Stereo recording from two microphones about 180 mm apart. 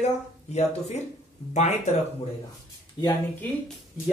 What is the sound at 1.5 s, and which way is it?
Speech, 40° left (ahead or behind).